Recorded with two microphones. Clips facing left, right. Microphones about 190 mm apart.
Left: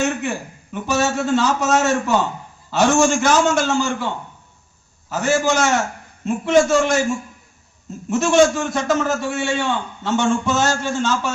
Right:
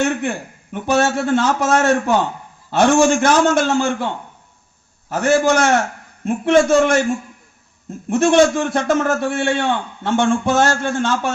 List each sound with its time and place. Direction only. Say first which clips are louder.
0.0 s a man's voice: right 2 dB; 55° right (ahead or behind)
5.1 s a man's voice: right 3 dB; 55° right (ahead or behind)
8.1 s a man's voice: right 2 dB; 60° right (ahead or behind)